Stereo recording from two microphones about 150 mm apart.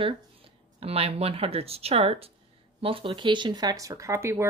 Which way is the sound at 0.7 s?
40° right (ahead or behind).